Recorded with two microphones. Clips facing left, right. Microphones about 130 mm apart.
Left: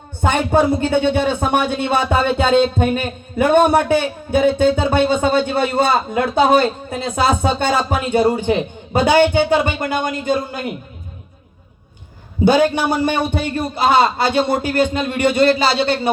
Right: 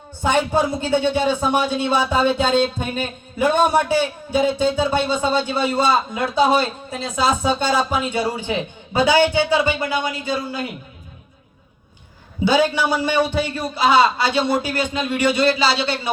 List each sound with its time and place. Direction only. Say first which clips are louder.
0.2 s a man's voice: left 3 dB; 55° left (ahead or behind)
12.5 s a man's voice: left 3 dB; 50° left (ahead or behind)